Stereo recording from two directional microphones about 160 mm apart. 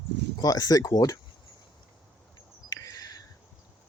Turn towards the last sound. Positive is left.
turn(degrees=25)  # may be behind; listen again after turning